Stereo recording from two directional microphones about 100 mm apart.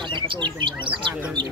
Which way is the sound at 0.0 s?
55° right (ahead or behind).